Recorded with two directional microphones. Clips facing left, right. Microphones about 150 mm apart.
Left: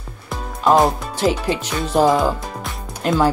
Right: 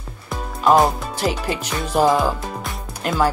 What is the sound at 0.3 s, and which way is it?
Music, centre (ahead or behind).